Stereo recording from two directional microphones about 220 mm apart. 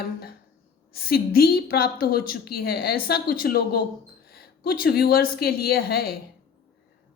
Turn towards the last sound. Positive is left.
turn(degrees=45)  # may be behind; listen again after turning